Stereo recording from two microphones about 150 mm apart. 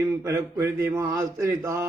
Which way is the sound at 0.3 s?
20° right (ahead or behind).